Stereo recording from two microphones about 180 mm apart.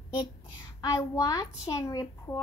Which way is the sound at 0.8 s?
20° left (ahead or behind).